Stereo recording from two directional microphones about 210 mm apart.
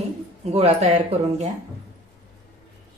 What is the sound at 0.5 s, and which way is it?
Speech, 30° right (ahead or behind).